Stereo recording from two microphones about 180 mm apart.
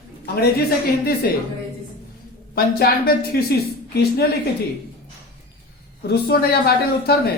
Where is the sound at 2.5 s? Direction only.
60° left (ahead or behind).